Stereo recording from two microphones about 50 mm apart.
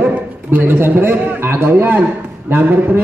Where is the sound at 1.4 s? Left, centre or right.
Right.